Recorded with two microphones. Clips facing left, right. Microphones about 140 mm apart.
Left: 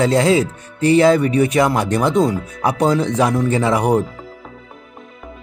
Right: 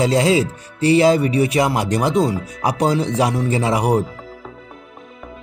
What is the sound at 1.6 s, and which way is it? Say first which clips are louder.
Speech: left 2 dB; 10° right (ahead or behind).